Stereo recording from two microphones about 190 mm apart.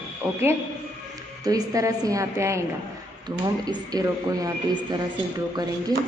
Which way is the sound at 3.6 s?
20° right (ahead or behind).